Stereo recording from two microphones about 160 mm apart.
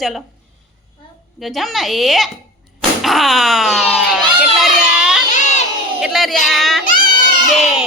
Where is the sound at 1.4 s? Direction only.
Centre (ahead or behind).